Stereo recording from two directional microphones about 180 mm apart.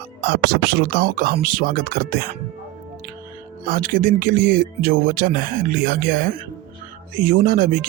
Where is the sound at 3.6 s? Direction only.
50° right (ahead or behind).